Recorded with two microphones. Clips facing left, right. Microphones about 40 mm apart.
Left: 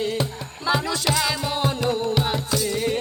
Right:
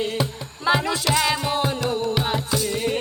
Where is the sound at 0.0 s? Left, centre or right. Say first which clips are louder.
Even; centre.